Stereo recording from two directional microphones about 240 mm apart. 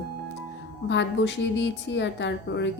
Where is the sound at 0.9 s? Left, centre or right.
Left.